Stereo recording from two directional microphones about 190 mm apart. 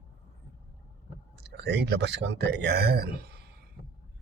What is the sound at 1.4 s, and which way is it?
Speech, 60° right (ahead or behind).